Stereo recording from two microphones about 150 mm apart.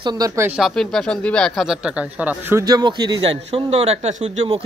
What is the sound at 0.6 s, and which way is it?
Speech, centre (ahead or behind).